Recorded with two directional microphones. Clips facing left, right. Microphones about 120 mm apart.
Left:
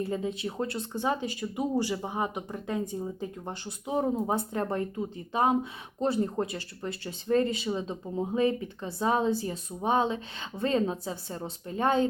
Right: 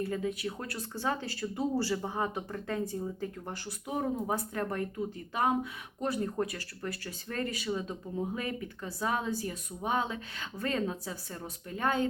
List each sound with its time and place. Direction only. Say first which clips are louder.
0.0 s speech: left 2 dB; 25° left (ahead or behind)